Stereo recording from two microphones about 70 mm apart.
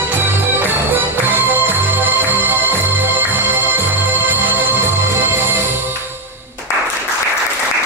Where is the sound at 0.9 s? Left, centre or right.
Right.